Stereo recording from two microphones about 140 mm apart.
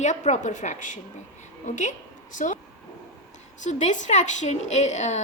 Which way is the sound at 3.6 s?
60° left (ahead or behind).